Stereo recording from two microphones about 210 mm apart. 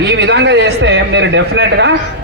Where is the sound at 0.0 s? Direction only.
55° right (ahead or behind).